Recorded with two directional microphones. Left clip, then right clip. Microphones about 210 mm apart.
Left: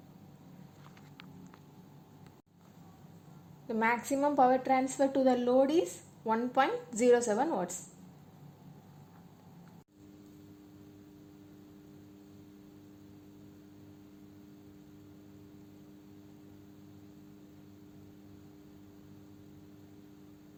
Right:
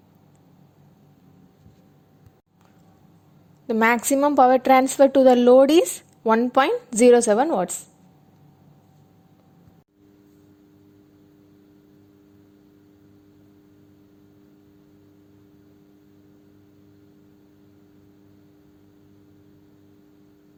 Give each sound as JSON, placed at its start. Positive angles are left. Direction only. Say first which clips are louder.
{"t": 3.7, "sound": "a woman's voice", "louder": "right 11 dB", "side_deg": -50}